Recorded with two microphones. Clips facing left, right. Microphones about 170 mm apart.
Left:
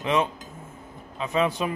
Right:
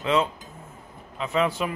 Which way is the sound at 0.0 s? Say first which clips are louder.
Right 1 dB; 20° left (ahead or behind).